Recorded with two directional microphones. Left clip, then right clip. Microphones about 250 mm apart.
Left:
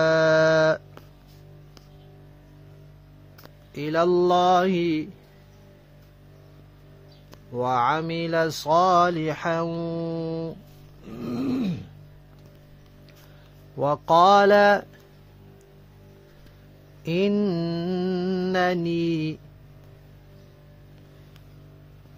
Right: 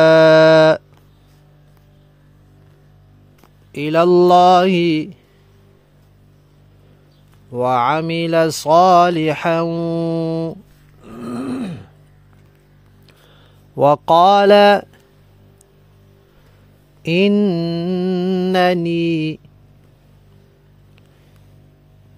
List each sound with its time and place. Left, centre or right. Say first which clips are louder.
0.0 s a sound: right 10 dB; right
3.7 s speech: right 9 dB; right
7.5 s speech: right 7 dB; right
11.1 s a sound: right 3 dB; right
13.7 s speech: right 7 dB; right
17.0 s mantra: right 8 dB; right